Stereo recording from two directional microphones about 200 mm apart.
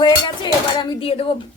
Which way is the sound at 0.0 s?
25° left (ahead or behind).